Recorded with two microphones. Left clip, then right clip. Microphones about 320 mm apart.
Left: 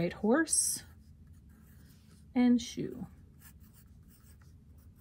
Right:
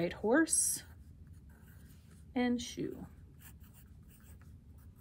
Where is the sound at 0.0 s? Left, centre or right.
Left.